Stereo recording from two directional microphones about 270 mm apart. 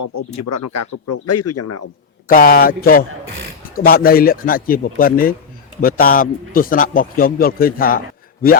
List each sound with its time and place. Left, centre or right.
0.0 s speech: left
2.2 s a man's voice: left